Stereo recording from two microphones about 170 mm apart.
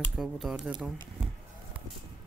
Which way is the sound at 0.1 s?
Centre (ahead or behind).